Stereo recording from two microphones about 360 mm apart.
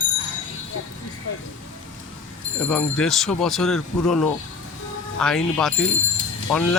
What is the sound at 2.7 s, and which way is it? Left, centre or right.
Speech, centre.